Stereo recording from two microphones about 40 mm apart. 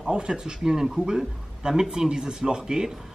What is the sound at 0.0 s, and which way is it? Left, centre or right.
Speech, right.